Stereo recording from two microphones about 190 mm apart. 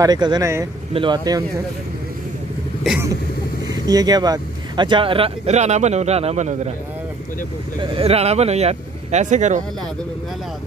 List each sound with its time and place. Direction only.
0.0 s speech: 20° right (ahead or behind)
3.7 s speech: 20° right (ahead or behind); by 6.7 s 35° right (ahead or behind)
7.8 s speech: 30° right (ahead or behind)